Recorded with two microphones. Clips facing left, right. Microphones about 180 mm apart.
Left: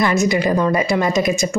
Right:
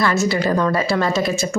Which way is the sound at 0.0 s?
15° left (ahead or behind).